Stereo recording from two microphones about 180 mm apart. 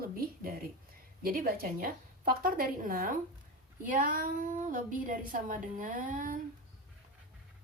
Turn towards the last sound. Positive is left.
turn(degrees=-50)  # may be behind; listen again after turning